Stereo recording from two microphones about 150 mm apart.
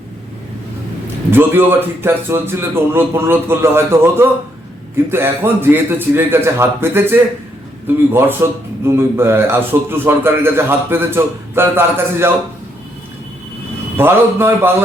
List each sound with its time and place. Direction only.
1.3 s speech: 15° right (ahead or behind)
13.9 s speech: 15° right (ahead or behind)